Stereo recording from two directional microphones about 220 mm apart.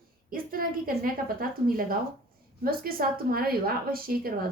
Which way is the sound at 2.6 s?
40° right (ahead or behind).